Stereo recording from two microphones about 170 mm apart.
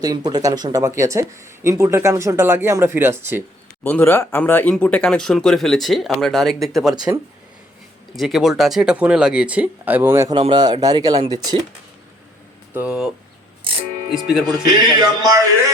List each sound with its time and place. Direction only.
0.0 s speech: 25° right (ahead or behind)
3.8 s speech: 10° left (ahead or behind)
6.9 s speech: 25° right (ahead or behind)
8.1 s speech: centre (ahead or behind); by 10.3 s 15° right (ahead or behind)
10.3 s speech: 25° right (ahead or behind)
12.7 s speech: 10° right (ahead or behind)
14.1 s speech: centre (ahead or behind)
14.4 s speech: 25° right (ahead or behind)